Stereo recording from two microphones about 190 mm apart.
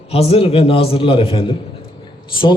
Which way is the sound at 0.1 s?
30° left (ahead or behind).